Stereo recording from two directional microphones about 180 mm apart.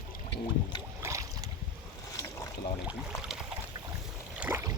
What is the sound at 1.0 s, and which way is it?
Boat, 15° right (ahead or behind).